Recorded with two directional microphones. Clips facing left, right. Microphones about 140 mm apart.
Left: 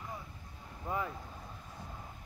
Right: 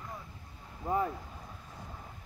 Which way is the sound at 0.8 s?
35° right (ahead or behind).